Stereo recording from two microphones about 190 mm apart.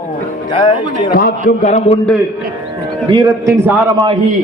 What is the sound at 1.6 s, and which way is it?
Speech, 35° left (ahead or behind).